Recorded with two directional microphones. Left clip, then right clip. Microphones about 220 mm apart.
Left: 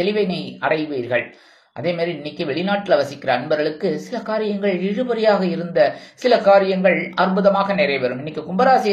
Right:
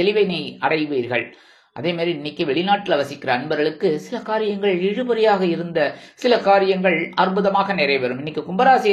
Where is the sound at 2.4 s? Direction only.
25° right (ahead or behind).